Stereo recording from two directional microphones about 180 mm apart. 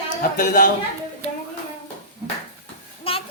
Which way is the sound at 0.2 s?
45° left (ahead or behind).